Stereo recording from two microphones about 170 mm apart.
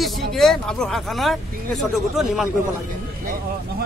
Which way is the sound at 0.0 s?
Centre (ahead or behind).